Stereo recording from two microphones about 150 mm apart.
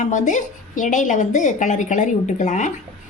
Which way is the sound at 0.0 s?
55° left (ahead or behind).